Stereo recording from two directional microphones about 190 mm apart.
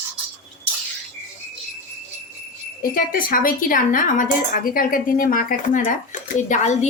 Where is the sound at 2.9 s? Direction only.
50° left (ahead or behind).